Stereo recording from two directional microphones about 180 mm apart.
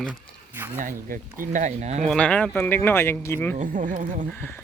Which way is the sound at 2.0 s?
5° left (ahead or behind).